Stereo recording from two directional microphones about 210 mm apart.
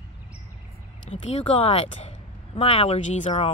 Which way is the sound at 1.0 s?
30° left (ahead or behind).